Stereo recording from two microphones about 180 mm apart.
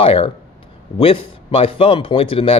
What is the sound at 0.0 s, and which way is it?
A man's voice, 30° left (ahead or behind).